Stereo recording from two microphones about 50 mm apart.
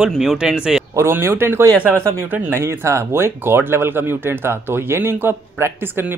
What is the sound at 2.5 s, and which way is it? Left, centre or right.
Speech, right.